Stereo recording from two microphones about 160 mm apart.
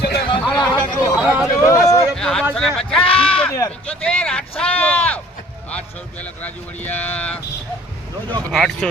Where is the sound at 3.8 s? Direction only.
5° left (ahead or behind).